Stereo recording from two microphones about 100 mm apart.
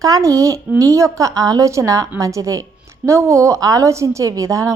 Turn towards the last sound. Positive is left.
turn(degrees=-30)  # may be behind; listen again after turning